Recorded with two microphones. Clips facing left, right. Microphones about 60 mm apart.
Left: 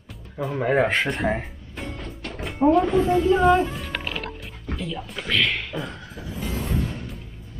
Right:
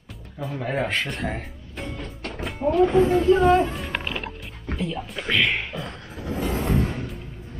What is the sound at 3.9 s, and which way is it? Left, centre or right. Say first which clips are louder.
Music: right 1 dB; right.